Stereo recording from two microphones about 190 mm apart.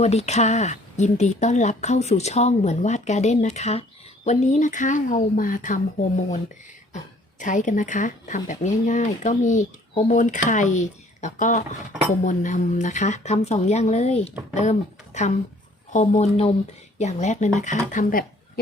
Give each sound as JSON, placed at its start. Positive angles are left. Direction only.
{"t": 0.0, "sound": "speech", "side_deg": 35}